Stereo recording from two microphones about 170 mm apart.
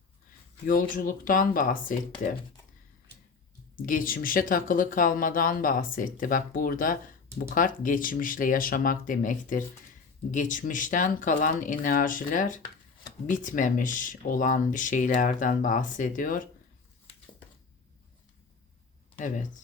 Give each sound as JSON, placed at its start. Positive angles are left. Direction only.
{"t": 0.7, "sound": "speech", "side_deg": 55}
{"t": 3.8, "sound": "speech", "side_deg": 55}